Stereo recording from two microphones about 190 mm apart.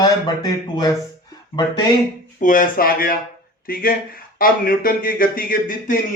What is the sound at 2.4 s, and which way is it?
Speech, 45° left (ahead or behind).